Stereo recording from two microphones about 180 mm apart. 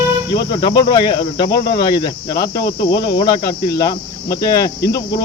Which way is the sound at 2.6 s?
65° left (ahead or behind).